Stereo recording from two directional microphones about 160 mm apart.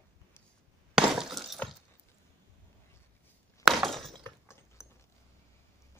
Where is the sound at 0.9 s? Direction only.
Centre (ahead or behind).